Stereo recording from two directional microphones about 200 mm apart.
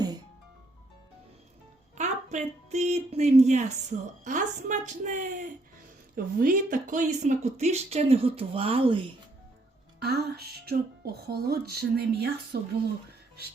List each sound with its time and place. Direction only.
2.0 s speech: 35° right (ahead or behind)
10.0 s speech: 55° right (ahead or behind)